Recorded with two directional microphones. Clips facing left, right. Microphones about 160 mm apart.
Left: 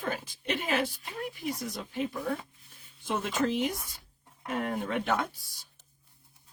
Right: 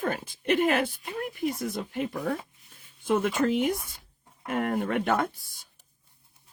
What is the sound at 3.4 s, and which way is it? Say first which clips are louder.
Speech: right 4 dB; 55° right (ahead or behind).